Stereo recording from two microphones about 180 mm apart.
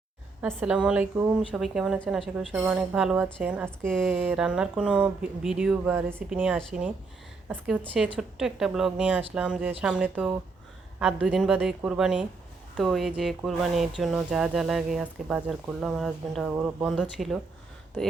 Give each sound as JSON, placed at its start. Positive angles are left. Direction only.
{"t": 0.4, "sound": "speech", "side_deg": -5}
{"t": 3.8, "sound": "speech", "side_deg": 5}
{"t": 4.1, "sound": "speech", "side_deg": -10}